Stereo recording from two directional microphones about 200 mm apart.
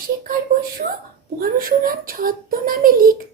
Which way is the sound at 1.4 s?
45° right (ahead or behind).